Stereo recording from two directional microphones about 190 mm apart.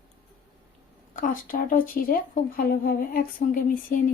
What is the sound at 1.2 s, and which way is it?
Speech, 45° left (ahead or behind).